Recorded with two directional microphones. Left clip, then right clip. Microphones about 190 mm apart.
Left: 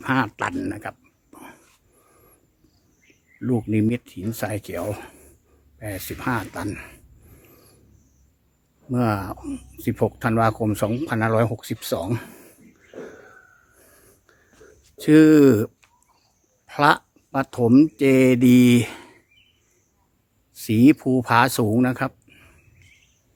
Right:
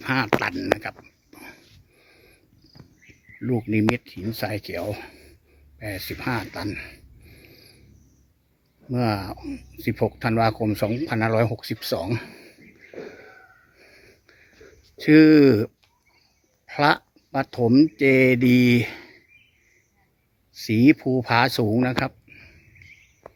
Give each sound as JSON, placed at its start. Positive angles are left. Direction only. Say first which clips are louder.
{"t": 0.0, "sound": "speech", "louder": "right 1 dB", "side_deg": 20}
{"t": 0.6, "sound": "a sound", "louder": "right 6 dB", "side_deg": 15}
{"t": 3.4, "sound": "speech", "louder": "even", "side_deg": 15}
{"t": 7.4, "sound": "a sound", "louder": "right 3 dB", "side_deg": 15}
{"t": 8.9, "sound": "speech", "louder": "left 2 dB", "side_deg": 15}
{"t": 14.9, "sound": "speech", "louder": "even", "side_deg": 15}
{"t": 20.7, "sound": "speech", "louder": "left 1 dB", "side_deg": 15}